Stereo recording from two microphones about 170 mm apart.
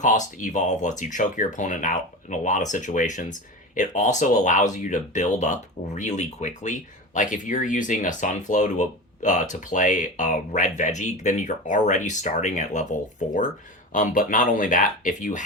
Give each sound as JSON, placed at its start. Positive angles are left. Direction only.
{"t": 0.0, "sound": "speech", "side_deg": 50}